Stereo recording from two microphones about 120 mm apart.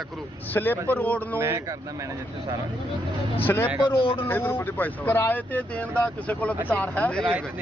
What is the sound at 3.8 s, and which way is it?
Speech, 50° left (ahead or behind).